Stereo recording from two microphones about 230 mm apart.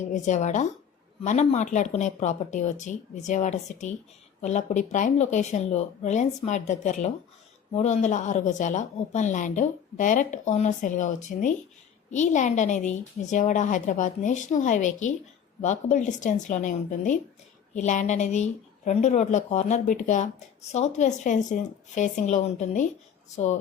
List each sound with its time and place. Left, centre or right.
0.0 s a woman's voice: left